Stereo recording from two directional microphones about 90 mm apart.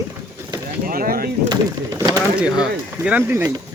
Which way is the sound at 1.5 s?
50° right (ahead or behind).